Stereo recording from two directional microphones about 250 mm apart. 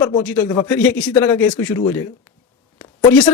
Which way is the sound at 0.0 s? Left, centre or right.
Centre.